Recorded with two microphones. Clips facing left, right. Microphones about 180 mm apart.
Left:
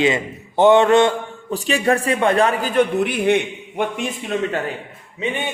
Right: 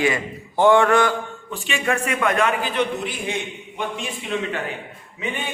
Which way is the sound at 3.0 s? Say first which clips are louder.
Left 10 dB; 60° left (ahead or behind).